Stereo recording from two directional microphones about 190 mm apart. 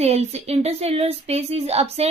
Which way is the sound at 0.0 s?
35° right (ahead or behind).